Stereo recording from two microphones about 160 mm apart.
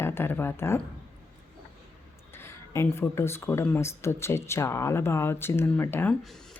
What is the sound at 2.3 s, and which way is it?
Speech, 15° left (ahead or behind).